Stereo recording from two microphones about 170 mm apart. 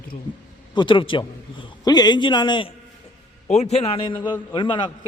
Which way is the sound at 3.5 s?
40° left (ahead or behind).